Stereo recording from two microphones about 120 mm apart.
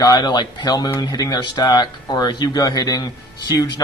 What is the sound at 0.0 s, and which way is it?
Speech, 35° left (ahead or behind).